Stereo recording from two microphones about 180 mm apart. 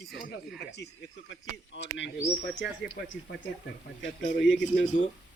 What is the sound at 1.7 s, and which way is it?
Speech, 90° left.